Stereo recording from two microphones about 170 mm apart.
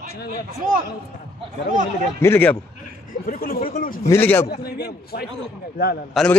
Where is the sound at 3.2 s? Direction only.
60° left (ahead or behind).